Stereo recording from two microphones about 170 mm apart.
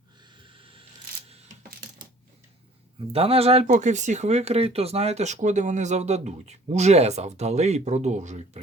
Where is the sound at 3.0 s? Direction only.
35° right (ahead or behind).